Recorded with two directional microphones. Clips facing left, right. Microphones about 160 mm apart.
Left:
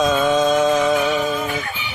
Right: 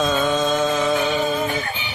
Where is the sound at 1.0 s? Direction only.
30° right (ahead or behind).